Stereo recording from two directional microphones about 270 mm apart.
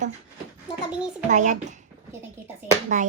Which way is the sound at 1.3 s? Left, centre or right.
Right.